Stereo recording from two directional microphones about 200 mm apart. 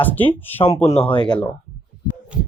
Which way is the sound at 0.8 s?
30° left (ahead or behind).